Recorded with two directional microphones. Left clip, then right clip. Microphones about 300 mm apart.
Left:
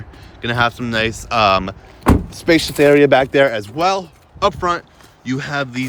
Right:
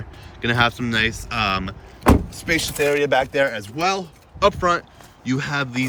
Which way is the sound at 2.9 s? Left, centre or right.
Left.